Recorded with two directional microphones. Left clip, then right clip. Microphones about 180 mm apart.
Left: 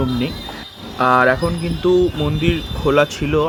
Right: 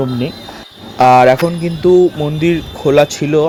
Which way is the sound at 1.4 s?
10° right (ahead or behind).